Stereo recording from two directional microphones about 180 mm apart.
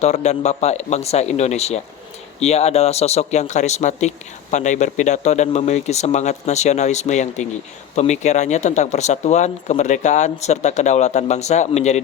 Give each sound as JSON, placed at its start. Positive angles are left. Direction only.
{"t": 0.0, "sound": "speech", "side_deg": 40}